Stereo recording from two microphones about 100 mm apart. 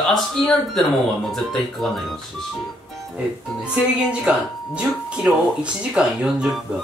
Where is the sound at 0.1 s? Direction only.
5° left (ahead or behind).